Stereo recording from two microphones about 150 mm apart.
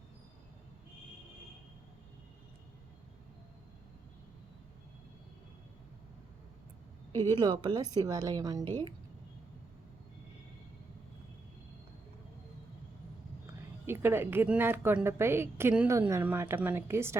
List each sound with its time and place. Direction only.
7.2 s a woman's voice: 30° right (ahead or behind)
13.5 s a woman's voice: 15° right (ahead or behind)